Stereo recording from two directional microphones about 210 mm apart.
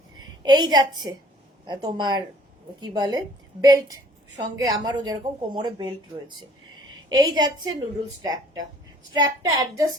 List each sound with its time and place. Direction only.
0.2 s a woman's voice: 20° right (ahead or behind)